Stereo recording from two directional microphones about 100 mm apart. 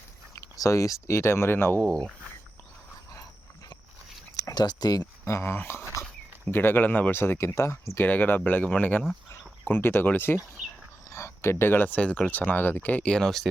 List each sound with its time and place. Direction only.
0.4 s speech: 35° left (ahead or behind)
1.8 s speech: 10° left (ahead or behind)
4.4 s speech: 40° left (ahead or behind)
5.2 s speech: 25° left (ahead or behind); by 13.5 s 5° left (ahead or behind)